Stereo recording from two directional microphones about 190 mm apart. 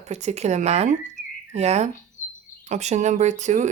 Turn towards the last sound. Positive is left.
turn(degrees=-40)  # may be behind; listen again after turning